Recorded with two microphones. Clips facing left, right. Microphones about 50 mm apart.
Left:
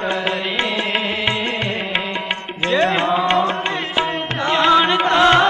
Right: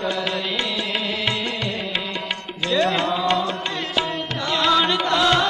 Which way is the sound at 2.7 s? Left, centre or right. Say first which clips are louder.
Left 3 dB; left.